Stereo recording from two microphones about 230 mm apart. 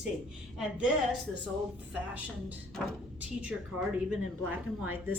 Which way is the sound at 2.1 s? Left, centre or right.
Centre.